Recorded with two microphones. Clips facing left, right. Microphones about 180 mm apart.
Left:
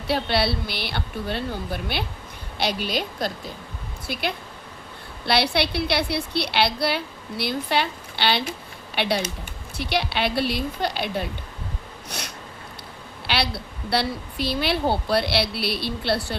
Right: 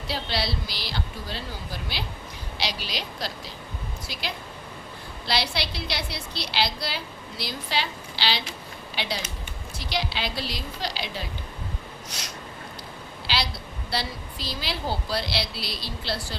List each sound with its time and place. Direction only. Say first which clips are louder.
0.1 s a woman's voice: left 7 dB; 60° left (ahead or behind)
12.0 s a sound: left 8 dB; 60° left (ahead or behind)
13.2 s a woman's voice: left 4 dB; 60° left (ahead or behind)